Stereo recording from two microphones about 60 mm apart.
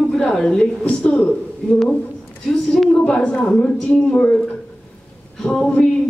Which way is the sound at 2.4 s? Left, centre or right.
Centre.